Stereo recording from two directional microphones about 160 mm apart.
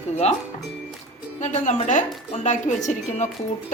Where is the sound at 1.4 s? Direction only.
45° left (ahead or behind).